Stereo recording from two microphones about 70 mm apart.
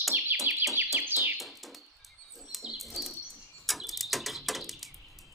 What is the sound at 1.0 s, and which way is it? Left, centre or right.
Bird, right.